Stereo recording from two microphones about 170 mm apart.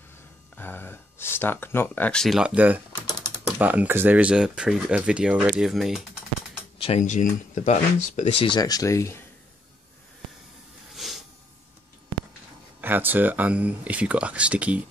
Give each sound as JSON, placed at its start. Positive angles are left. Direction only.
{"t": 0.6, "sound": "speech", "side_deg": 10}
{"t": 6.8, "sound": "speech", "side_deg": 40}
{"t": 8.5, "sound": "speech", "side_deg": 20}
{"t": 11.0, "sound": "a sound", "side_deg": 0}
{"t": 12.8, "sound": "speech", "side_deg": -10}